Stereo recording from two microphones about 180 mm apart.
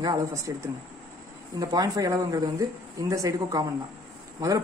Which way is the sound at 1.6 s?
20° right (ahead or behind).